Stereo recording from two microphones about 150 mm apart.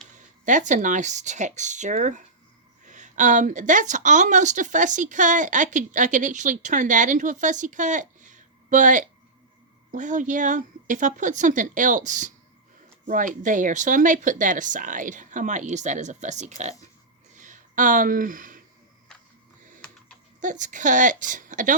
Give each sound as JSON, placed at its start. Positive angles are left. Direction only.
{"t": 0.4, "sound": "a woman's voice", "side_deg": -55}
{"t": 17.3, "sound": "a sound", "side_deg": -60}
{"t": 20.4, "sound": "a woman's voice", "side_deg": -55}